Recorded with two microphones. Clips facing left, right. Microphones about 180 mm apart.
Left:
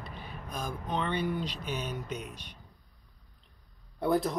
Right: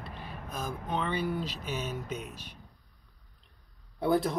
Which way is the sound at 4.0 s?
Centre (ahead or behind).